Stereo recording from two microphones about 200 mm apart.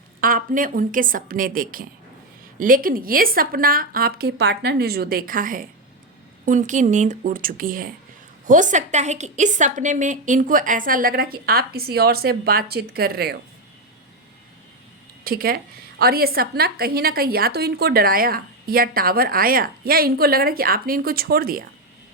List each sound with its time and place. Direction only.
0.2 s a woman's voice: 45° right (ahead or behind)
15.2 s a woman's voice: 50° right (ahead or behind)